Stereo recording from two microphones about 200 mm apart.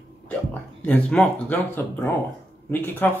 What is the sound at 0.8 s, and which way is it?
Speech, 5° left (ahead or behind).